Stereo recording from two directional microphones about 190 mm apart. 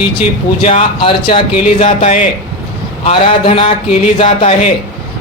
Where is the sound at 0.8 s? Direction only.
25° left (ahead or behind).